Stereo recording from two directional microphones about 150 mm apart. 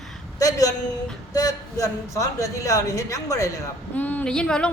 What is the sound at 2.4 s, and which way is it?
Speech, 20° left (ahead or behind).